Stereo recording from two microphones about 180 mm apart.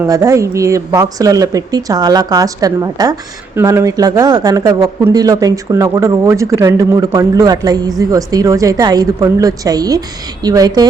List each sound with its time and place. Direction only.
0.1 s speech: 15° right (ahead or behind)